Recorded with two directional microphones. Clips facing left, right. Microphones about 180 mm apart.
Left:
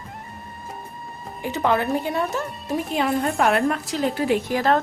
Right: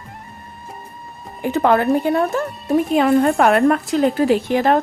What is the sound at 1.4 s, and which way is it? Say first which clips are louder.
Speech: right 6 dB; 55° right (ahead or behind).